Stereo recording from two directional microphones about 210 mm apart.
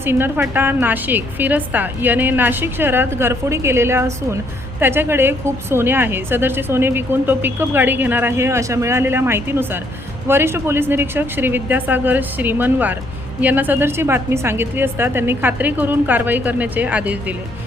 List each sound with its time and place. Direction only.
0.0 s a woman's voice: 10° right (ahead or behind)